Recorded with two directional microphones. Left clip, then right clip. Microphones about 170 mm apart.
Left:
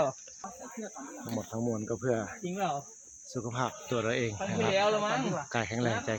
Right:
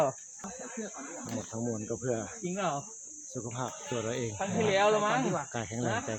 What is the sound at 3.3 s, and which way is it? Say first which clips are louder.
Speech: left 4 dB; 45° left (ahead or behind).